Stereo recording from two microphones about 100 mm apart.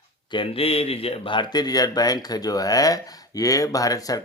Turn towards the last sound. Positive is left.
turn(degrees=35)  # may be behind; listen again after turning